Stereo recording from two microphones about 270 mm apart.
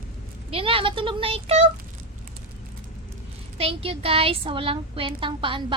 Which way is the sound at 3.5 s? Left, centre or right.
Right.